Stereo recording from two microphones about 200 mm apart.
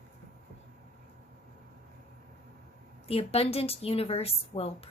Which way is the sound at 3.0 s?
30° left (ahead or behind).